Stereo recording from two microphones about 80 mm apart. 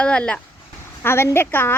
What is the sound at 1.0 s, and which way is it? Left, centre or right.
Speech, left.